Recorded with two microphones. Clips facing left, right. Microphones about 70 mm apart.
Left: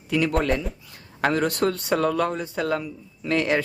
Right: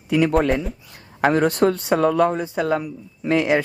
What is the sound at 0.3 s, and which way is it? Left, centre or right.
Speech, centre.